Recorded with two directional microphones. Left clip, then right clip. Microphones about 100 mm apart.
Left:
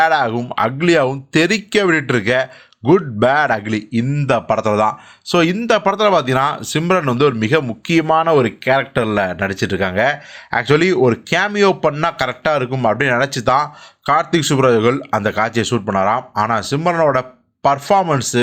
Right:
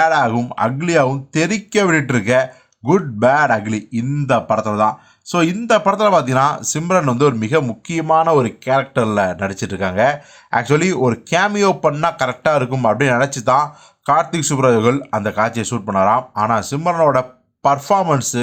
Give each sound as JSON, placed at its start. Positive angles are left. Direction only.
{"t": 0.0, "sound": "speech", "side_deg": 30}
{"t": 5.3, "sound": "speech", "side_deg": 25}